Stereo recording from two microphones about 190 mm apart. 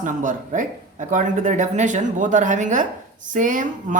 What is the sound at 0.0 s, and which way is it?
Speech, 45° right (ahead or behind).